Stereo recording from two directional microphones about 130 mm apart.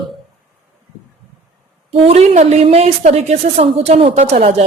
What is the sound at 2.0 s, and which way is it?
A woman's voice, 55° right (ahead or behind).